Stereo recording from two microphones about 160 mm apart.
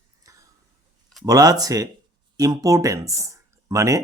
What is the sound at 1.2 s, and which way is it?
Speech, 25° right (ahead or behind).